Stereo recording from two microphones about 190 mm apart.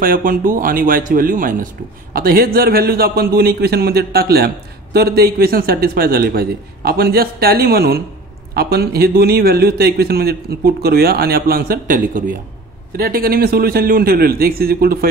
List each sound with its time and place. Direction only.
0.0 s a man's voice: 45° right (ahead or behind)